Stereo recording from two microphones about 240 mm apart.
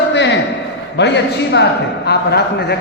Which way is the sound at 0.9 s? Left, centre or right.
Left.